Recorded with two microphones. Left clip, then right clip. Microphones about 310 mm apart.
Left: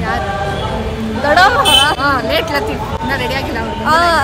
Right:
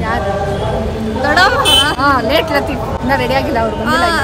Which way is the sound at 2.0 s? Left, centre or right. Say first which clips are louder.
Right 2 dB; centre.